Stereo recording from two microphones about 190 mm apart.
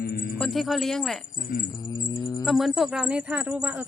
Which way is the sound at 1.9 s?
20° left (ahead or behind).